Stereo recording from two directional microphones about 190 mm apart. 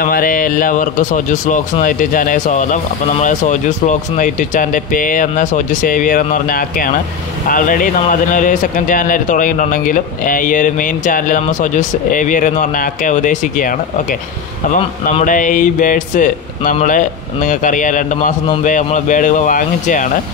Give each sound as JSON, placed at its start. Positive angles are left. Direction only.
{"t": 0.0, "sound": "speech", "side_deg": 50}
{"t": 15.2, "sound": "speech", "side_deg": 45}